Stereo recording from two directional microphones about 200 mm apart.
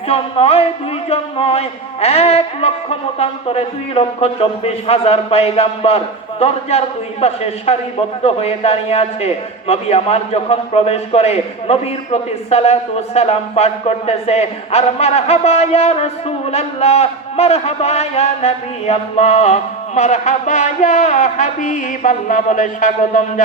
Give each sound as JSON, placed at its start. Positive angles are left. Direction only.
{"t": 0.1, "sound": "a man's voice", "side_deg": 30}